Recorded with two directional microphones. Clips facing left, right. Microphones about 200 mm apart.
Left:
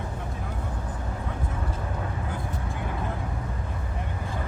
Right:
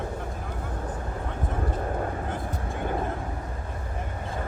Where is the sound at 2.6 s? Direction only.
35° right (ahead or behind).